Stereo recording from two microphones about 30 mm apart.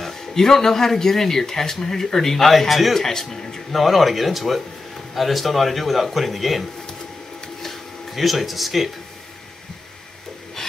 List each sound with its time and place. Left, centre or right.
0.0 s speech: centre
3.7 s a man's voice: centre
7.6 s a sound: centre
10.6 s filing: centre